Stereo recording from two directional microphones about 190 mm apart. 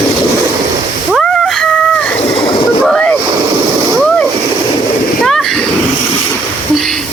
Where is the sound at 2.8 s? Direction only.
5° left (ahead or behind).